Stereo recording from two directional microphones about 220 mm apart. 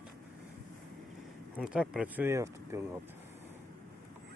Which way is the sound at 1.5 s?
5° right (ahead or behind).